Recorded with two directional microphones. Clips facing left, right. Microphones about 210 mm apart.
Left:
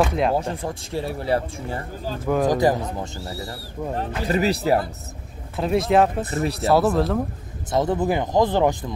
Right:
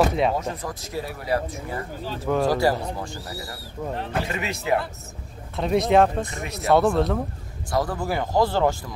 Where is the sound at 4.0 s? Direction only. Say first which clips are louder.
Left 7 dB; 35° left (ahead or behind).